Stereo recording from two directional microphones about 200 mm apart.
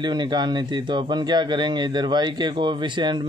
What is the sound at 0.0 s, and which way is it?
Speech, 20° right (ahead or behind).